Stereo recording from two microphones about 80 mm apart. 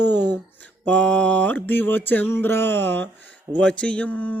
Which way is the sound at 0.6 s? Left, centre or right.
Centre.